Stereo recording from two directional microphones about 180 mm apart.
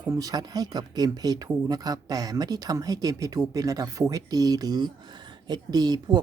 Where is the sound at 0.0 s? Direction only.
20° right (ahead or behind).